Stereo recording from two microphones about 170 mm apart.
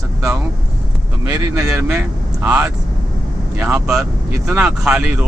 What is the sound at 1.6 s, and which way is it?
Speech, 10° right (ahead or behind).